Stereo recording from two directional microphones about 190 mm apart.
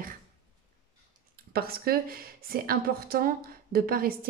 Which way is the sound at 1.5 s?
55° right (ahead or behind).